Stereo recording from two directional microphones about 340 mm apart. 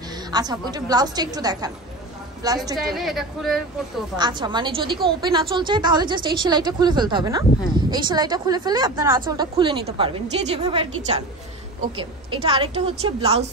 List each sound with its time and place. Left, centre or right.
0.1 s a woman's voice: centre
2.9 s a woman's voice: centre
4.2 s a woman's voice: centre